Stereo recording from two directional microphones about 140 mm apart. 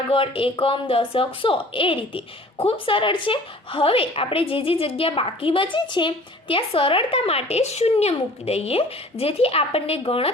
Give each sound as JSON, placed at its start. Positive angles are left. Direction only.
{"t": 0.1, "sound": "speech", "side_deg": 40}